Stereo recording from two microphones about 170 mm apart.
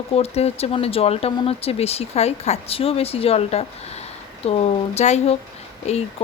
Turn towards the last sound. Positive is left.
turn(degrees=40)  # may be behind; listen again after turning